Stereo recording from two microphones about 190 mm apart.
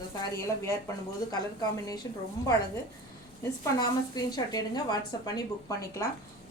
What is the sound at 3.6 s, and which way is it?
A woman's voice, 20° left (ahead or behind).